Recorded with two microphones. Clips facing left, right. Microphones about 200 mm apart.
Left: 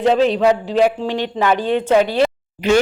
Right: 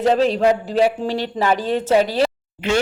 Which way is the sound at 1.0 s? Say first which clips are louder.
Left 2 dB; 40° right (ahead or behind).